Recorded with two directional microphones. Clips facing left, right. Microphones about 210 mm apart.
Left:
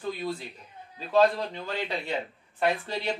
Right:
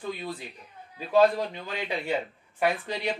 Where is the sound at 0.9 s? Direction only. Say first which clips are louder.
Right 1 dB; 15° right (ahead or behind).